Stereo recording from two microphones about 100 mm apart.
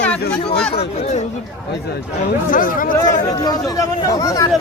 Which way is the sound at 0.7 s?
90° left.